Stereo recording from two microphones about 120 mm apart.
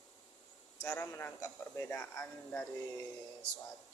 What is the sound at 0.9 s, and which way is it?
A man's voice, 20° left (ahead or behind).